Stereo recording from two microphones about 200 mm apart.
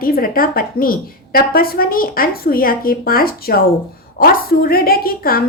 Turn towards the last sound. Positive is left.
turn(degrees=45)  # may be behind; listen again after turning